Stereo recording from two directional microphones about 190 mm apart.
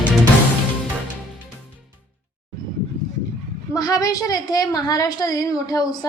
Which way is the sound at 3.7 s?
20° left (ahead or behind).